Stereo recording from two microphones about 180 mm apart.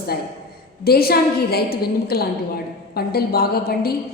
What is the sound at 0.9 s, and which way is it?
A woman's voice, 60° left (ahead or behind).